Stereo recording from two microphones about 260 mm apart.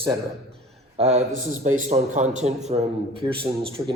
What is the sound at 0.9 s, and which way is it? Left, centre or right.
A man's voice, right.